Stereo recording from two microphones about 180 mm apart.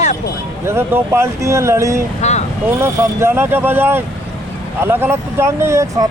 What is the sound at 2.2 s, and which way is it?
Speech, 40° left (ahead or behind).